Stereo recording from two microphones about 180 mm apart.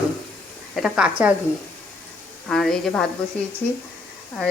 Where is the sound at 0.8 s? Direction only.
5° right (ahead or behind).